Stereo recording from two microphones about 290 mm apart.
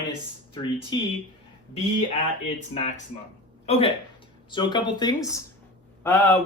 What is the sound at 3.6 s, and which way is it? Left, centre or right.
Speech, centre.